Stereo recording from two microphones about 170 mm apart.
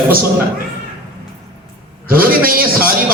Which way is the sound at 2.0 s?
60° right (ahead or behind).